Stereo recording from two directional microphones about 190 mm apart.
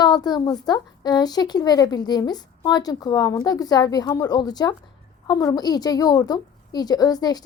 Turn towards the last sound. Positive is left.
turn(degrees=20)  # may be behind; listen again after turning